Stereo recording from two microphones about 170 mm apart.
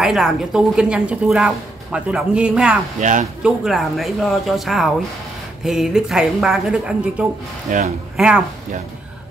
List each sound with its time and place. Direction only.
0.0 s a woman's voice: 5° right (ahead or behind)
3.0 s speech: 45° right (ahead or behind)
3.4 s a woman's voice: centre (ahead or behind)
7.7 s speech: 50° right (ahead or behind)
8.2 s a woman's voice: 5° right (ahead or behind)